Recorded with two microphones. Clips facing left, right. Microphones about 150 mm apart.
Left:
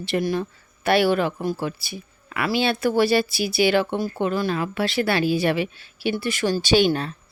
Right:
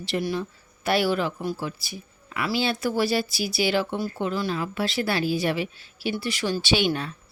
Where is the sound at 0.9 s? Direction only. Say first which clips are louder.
Left 4 dB; 60° left (ahead or behind); by 7.1 s 40° left (ahead or behind).